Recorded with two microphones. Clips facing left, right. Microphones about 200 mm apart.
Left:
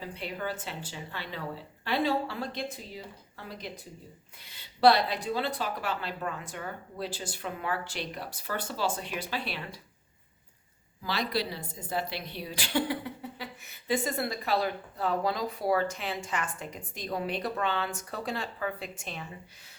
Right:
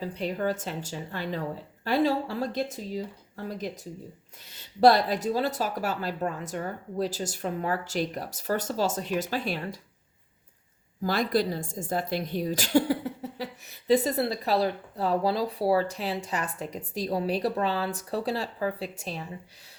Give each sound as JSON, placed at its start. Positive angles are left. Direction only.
{"t": 0.0, "sound": "speech", "side_deg": -40}
{"t": 11.0, "sound": "speech", "side_deg": -50}